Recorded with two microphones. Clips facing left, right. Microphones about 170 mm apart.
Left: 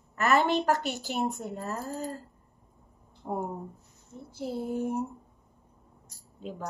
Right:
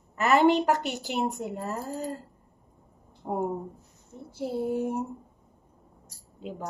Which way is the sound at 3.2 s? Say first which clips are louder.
Right 2 dB; 25° right (ahead or behind).